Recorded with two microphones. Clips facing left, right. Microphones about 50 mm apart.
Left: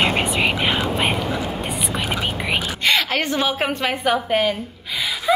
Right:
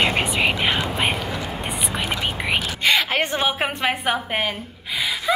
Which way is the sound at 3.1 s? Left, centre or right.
Right.